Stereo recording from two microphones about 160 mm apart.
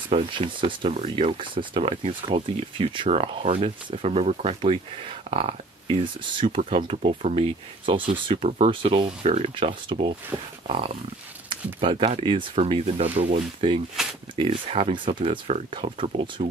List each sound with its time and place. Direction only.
0.1 s speech: 30° right (ahead or behind)
14.0 s speech: 5° right (ahead or behind)
14.3 s speech: 35° right (ahead or behind)